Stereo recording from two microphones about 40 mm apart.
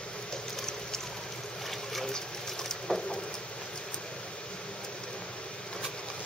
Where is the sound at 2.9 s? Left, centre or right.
Left.